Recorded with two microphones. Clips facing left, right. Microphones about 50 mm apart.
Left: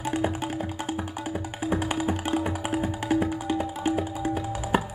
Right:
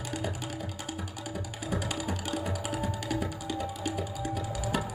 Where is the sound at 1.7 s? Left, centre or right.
Left.